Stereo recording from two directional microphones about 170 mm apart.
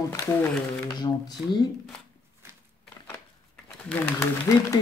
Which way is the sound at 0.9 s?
25° left (ahead or behind).